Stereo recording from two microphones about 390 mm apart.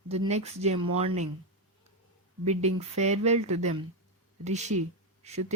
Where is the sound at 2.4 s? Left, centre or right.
Centre.